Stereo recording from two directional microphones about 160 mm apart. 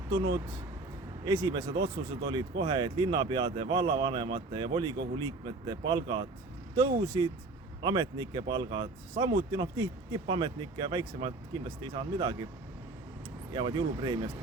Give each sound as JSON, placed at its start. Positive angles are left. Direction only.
{"t": 0.1, "sound": "speech", "side_deg": -25}
{"t": 13.5, "sound": "speech", "side_deg": -30}